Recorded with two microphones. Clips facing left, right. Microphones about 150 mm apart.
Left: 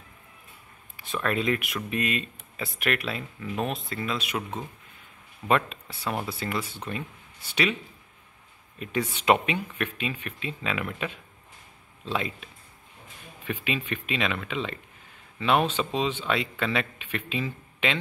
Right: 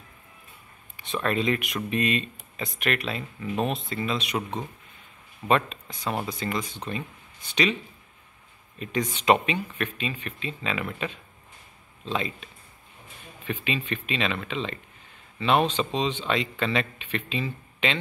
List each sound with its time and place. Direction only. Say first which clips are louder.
0.9 s a man's voice: right 1 dB; 5° left (ahead or behind)
6.6 s speech: right 1 dB; 15° right (ahead or behind)
7.4 s a man's voice: right 2 dB; 5° left (ahead or behind)
8.7 s a man's voice: right 1 dB; 10° left (ahead or behind)
13.5 s a man's voice: right 1 dB; 10° left (ahead or behind)